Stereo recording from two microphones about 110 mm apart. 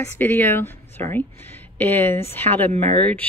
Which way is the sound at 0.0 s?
20° left (ahead or behind).